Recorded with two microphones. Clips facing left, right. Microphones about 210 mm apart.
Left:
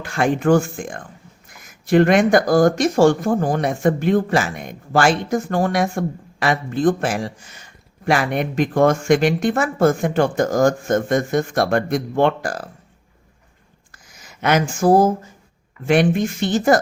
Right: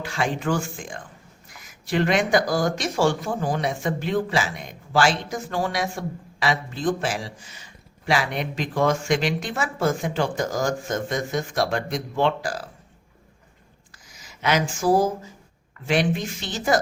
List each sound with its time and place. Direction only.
0.0 s speech: 50° left (ahead or behind)
13.9 s speech: 55° left (ahead or behind)